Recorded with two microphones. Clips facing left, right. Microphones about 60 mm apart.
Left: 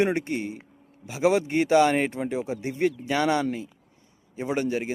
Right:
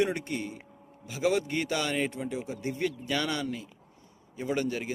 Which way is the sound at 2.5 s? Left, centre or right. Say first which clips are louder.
Left 6 dB; left.